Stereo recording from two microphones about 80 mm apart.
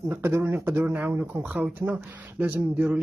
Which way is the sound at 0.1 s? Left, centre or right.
Right.